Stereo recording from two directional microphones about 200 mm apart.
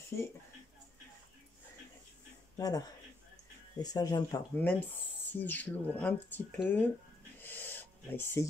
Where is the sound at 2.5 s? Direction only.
20° left (ahead or behind).